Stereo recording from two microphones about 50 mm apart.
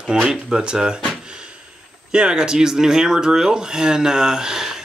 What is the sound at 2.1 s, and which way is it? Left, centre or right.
Speech, centre.